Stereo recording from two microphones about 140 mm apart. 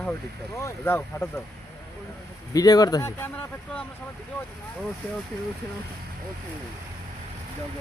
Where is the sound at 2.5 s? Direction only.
25° left (ahead or behind); by 3.8 s 10° left (ahead or behind).